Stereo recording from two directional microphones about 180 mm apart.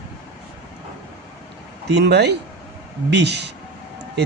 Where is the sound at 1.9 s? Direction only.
70° right (ahead or behind).